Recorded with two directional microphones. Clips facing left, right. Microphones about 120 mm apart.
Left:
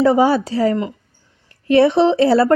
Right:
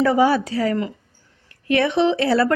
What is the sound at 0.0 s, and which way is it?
A woman's voice, 25° left (ahead or behind).